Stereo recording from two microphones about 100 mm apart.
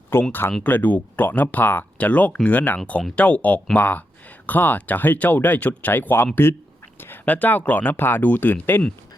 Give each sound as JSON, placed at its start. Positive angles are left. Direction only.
{"t": 0.1, "sound": "speech", "side_deg": 20}